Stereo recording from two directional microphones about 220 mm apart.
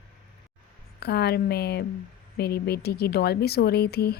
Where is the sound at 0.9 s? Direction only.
45° left (ahead or behind).